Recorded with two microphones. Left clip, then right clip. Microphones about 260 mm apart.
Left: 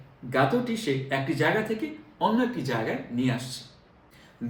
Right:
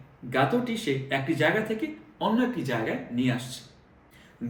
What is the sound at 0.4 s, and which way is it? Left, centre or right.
Speech, left.